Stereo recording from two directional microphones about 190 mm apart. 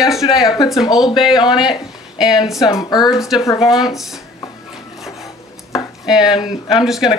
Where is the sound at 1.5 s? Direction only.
5° right (ahead or behind).